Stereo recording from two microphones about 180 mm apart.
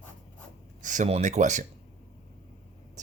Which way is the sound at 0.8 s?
45° right (ahead or behind).